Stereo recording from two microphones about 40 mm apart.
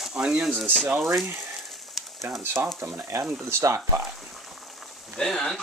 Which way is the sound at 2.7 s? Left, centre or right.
Right.